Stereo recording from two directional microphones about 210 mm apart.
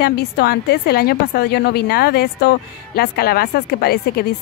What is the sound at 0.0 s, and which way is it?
A woman's voice, 50° left (ahead or behind).